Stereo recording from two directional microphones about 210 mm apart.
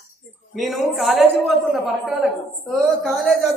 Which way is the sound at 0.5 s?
Centre (ahead or behind).